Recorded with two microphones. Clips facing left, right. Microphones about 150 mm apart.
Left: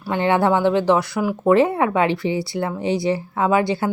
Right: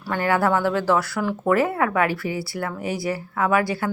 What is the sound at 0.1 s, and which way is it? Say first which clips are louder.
Speech: left 3 dB; 25° left (ahead or behind).